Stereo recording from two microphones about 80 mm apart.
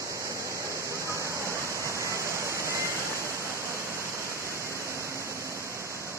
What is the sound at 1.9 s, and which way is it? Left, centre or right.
Waterfall, left.